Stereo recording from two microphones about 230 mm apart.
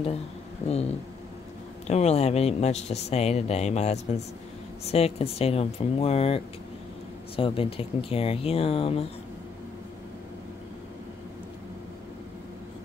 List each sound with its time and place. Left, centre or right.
1.9 s speech: left